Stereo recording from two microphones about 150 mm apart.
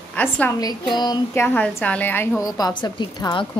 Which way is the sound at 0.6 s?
30° left (ahead or behind).